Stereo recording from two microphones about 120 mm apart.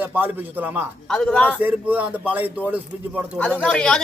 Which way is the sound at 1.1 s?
5° left (ahead or behind).